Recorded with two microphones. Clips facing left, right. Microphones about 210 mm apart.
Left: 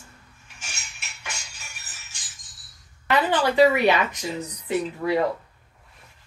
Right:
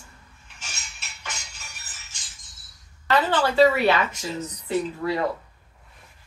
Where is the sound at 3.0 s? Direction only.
15° left (ahead or behind).